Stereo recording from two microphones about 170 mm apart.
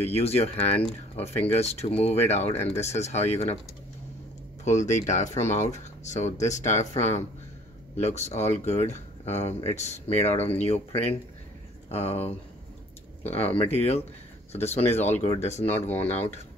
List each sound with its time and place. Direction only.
0.0 s speech: 35° left (ahead or behind)
4.6 s speech: 45° left (ahead or behind)
13.4 s speech: 35° left (ahead or behind)